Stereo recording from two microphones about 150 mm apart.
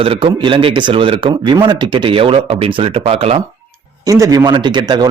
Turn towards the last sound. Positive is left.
turn(degrees=-30)  # may be behind; listen again after turning